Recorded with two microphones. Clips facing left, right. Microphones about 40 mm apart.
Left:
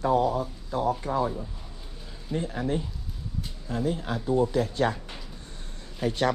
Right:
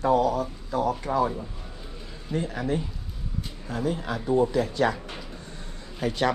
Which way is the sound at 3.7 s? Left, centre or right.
Right.